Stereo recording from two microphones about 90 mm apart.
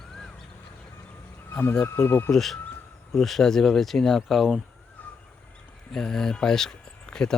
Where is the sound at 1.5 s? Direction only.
25° left (ahead or behind).